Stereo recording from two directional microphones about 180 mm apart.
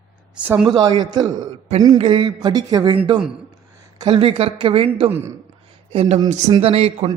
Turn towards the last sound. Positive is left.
turn(degrees=-35)  # may be behind; listen again after turning